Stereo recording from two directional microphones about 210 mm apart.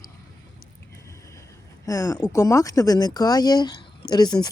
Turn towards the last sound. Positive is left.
turn(degrees=20)  # may be behind; listen again after turning